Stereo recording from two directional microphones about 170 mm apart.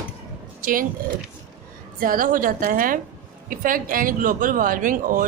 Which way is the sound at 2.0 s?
55° right (ahead or behind).